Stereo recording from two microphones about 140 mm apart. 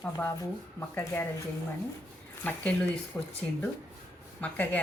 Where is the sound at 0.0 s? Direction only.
20° left (ahead or behind).